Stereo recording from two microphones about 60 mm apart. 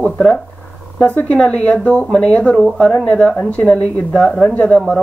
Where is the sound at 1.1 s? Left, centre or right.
Left.